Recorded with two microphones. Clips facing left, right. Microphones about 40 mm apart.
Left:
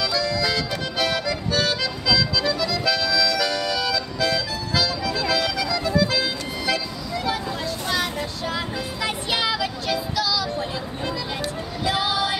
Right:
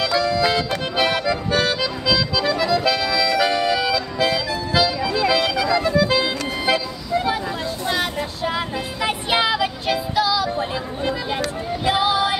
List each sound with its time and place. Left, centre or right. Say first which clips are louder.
0.0 s music: right 4 dB; right